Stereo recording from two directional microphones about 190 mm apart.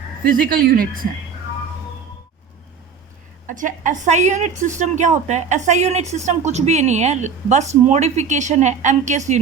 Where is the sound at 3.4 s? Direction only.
40° right (ahead or behind).